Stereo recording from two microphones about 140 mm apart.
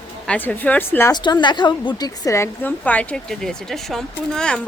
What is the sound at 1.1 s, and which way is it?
Speech, 30° left (ahead or behind).